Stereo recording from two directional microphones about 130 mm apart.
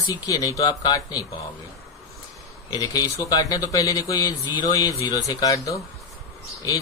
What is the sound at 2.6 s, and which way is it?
A man's voice, 30° left (ahead or behind).